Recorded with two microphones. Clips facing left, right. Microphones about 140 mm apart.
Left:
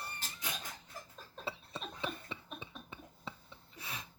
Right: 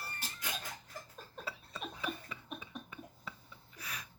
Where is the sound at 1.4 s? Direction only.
25° left (ahead or behind).